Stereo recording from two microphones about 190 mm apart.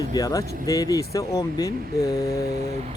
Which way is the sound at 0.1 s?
20° left (ahead or behind).